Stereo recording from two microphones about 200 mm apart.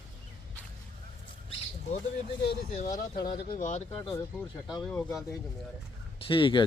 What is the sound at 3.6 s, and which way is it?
Speech, 35° left (ahead or behind).